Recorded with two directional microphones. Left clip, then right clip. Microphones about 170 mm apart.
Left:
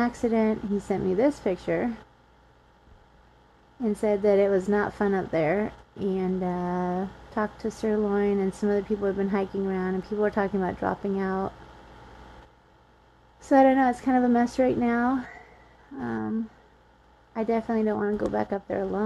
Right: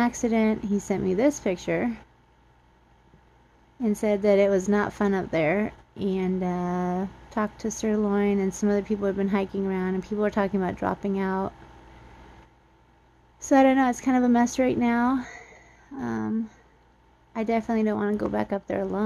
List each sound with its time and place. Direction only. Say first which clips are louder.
0.0 s a woman's voice: even; 20° right (ahead or behind)
4.0 s a woman's voice: right 1 dB; 20° right (ahead or behind)
13.5 s a woman's voice: even; 20° right (ahead or behind)